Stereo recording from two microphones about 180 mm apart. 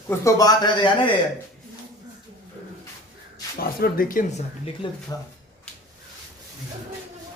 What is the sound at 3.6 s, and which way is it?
Speech, 55° left (ahead or behind).